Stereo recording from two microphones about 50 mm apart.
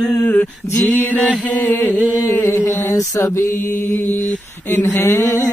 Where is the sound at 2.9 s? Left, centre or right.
Left.